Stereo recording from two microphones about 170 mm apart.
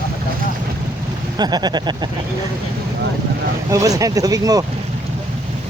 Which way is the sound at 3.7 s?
20° right (ahead or behind).